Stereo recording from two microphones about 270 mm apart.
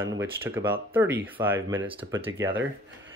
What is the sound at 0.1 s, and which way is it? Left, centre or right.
Speech, centre.